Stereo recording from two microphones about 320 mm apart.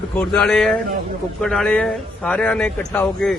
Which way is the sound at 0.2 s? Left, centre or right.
Centre.